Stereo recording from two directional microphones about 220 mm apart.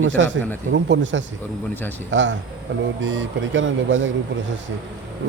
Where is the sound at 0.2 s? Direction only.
55° right (ahead or behind).